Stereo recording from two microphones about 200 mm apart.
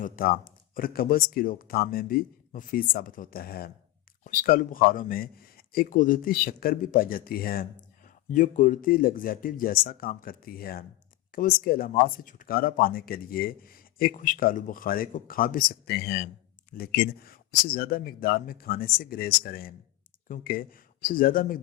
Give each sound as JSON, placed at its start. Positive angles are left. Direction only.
{"t": 0.0, "sound": "speech", "side_deg": 45}